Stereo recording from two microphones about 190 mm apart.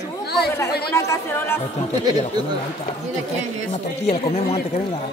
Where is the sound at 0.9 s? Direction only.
15° left (ahead or behind).